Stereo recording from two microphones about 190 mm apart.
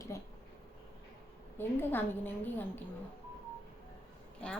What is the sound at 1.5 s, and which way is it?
A woman's voice, 10° left (ahead or behind).